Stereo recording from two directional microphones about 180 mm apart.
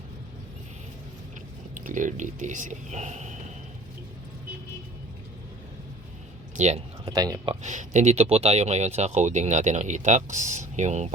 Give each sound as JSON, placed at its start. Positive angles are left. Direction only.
{"t": 1.7, "sound": "speech", "side_deg": -45}
{"t": 6.6, "sound": "a sound", "side_deg": -35}
{"t": 7.1, "sound": "speech", "side_deg": -20}
{"t": 7.6, "sound": "speech", "side_deg": -40}